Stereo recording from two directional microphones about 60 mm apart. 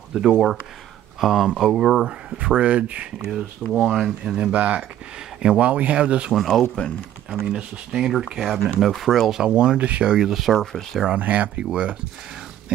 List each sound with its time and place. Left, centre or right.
0.1 s speech: centre
2.3 s speech: centre
3.2 s speech: centre
4.4 s speech: right
6.3 s speech: centre
10.5 s speech: centre
11.1 s speech: right